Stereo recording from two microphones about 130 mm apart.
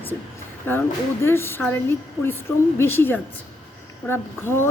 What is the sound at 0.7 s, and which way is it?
A woman's voice, 15° left (ahead or behind).